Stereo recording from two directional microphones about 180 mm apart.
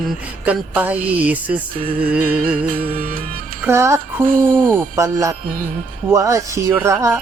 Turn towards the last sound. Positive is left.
turn(degrees=-15)  # may be behind; listen again after turning